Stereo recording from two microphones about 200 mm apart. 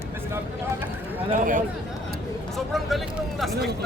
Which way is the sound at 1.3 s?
40° right (ahead or behind).